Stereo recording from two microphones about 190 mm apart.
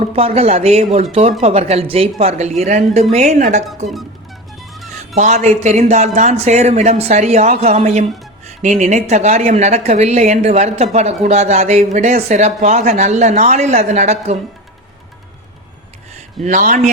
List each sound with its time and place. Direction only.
0.2 s speech: 30° right (ahead or behind)
4.7 s music: centre (ahead or behind)
4.9 s speech: 40° right (ahead or behind)
16.4 s speech: 40° right (ahead or behind)